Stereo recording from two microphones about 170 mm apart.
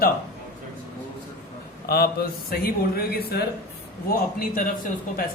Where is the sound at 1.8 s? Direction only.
65° left (ahead or behind).